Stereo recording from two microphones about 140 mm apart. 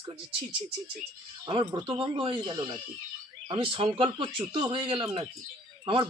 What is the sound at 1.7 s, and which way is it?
A man's voice, 35° right (ahead or behind).